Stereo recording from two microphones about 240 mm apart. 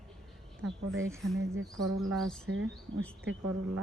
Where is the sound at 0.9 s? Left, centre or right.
Centre.